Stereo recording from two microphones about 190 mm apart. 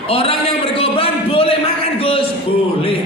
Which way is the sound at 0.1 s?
30° left (ahead or behind).